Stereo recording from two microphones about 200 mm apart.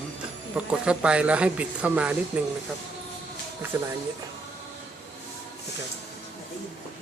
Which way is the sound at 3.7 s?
15° right (ahead or behind).